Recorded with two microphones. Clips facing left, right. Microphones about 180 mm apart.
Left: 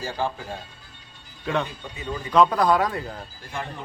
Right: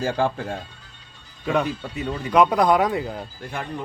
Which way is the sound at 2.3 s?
15° right (ahead or behind).